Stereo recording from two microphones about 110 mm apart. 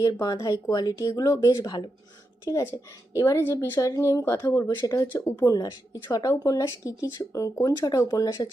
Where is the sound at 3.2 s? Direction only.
25° left (ahead or behind).